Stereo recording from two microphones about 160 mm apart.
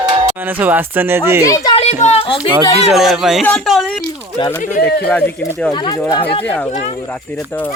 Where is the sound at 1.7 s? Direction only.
40° left (ahead or behind).